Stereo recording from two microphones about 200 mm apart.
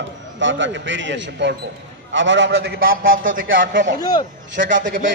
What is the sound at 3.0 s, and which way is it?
Speech, 75° right (ahead or behind).